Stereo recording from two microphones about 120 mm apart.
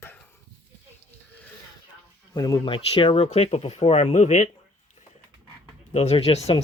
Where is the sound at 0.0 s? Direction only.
15° left (ahead or behind).